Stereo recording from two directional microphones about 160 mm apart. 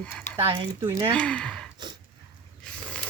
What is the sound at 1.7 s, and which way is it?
Dog, 25° right (ahead or behind).